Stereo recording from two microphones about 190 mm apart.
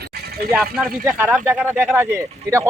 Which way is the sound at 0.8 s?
5° right (ahead or behind).